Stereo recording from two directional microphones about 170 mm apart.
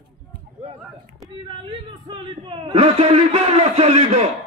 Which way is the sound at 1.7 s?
30° right (ahead or behind).